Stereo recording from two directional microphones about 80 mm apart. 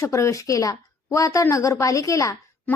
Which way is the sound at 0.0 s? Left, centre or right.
Left.